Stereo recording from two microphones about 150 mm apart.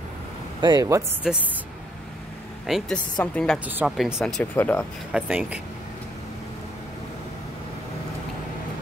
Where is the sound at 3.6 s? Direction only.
10° right (ahead or behind).